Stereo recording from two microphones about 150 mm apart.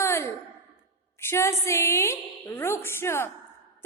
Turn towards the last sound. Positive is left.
turn(degrees=15)  # may be behind; listen again after turning